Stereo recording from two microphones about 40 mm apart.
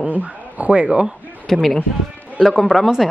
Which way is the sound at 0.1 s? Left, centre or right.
Right.